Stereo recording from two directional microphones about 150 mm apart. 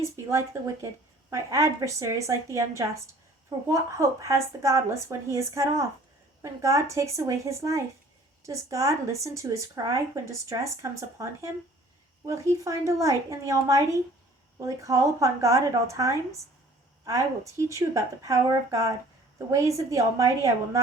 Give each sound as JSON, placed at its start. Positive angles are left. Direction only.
{"t": 0.0, "sound": "speech", "side_deg": -20}
{"t": 12.2, "sound": "speech", "side_deg": -20}